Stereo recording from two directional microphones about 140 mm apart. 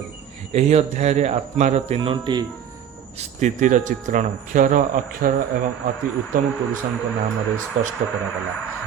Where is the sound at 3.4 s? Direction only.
65° right (ahead or behind); by 5.3 s 85° right.